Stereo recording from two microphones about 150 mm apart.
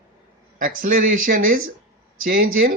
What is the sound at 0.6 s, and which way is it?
A man's voice, 60° right (ahead or behind).